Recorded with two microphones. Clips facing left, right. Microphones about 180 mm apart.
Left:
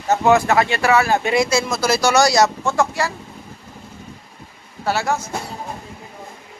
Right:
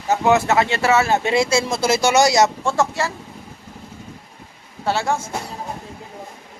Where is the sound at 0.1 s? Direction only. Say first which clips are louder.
Left 1 dB; 20° right (ahead or behind).